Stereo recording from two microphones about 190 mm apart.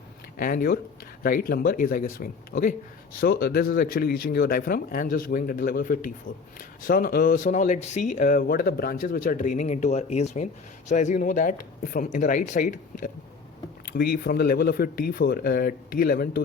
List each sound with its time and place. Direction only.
0.3 s speech: 50° left (ahead or behind)
13.9 s speech: 55° left (ahead or behind)